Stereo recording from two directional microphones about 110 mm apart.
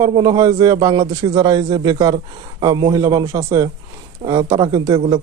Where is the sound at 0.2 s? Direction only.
35° right (ahead or behind).